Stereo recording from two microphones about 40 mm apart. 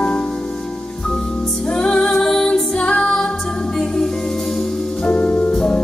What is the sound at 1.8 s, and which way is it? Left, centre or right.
Music, centre.